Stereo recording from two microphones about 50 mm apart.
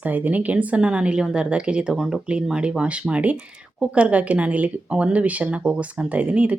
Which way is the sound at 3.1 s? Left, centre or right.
Right.